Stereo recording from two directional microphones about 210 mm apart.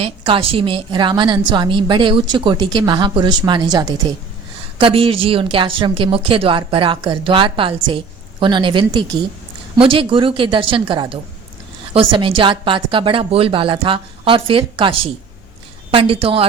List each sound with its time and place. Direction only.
0.0 s speech: 25° right (ahead or behind)